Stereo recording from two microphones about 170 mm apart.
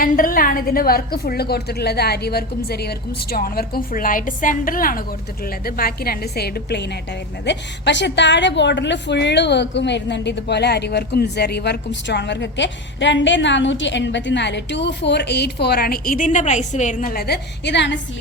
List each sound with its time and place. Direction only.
0.0 s a woman's voice: 55° left (ahead or behind); by 6.9 s 75° left (ahead or behind)
7.4 s a woman's voice: 90° left